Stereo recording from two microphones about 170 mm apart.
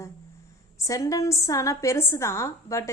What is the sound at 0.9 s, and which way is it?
A woman's voice, 20° left (ahead or behind).